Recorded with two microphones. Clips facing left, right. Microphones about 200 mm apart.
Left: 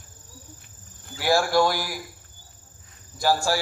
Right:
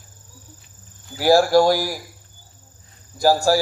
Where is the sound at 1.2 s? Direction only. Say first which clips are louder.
Right 6 dB; 40° right (ahead or behind).